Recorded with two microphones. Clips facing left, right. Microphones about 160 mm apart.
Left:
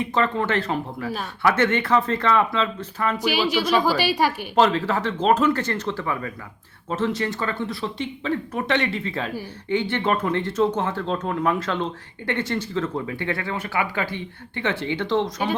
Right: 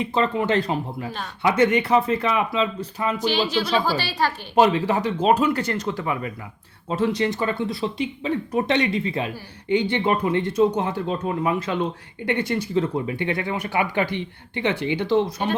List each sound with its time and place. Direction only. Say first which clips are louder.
0.0 s speech: right 1 dB; 15° right (ahead or behind)
3.2 s a woman's voice: even; 10° left (ahead or behind)
4.5 s speech: right 3 dB; 15° right (ahead or behind)